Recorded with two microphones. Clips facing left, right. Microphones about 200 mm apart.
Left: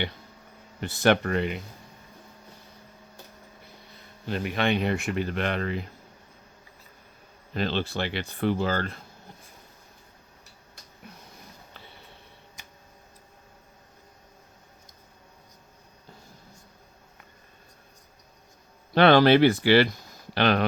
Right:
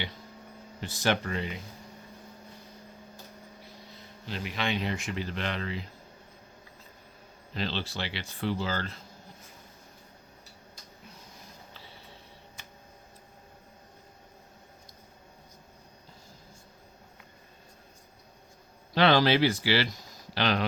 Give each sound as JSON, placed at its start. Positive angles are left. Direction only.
{"t": 0.8, "sound": "speech", "side_deg": 60}
{"t": 4.3, "sound": "speech", "side_deg": 55}
{"t": 7.5, "sound": "speech", "side_deg": 50}
{"t": 18.9, "sound": "speech", "side_deg": 55}